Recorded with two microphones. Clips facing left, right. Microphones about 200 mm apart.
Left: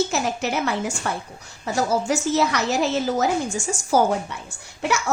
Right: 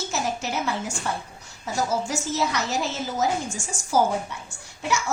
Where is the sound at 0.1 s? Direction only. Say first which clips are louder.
Left 4 dB; 65° left (ahead or behind).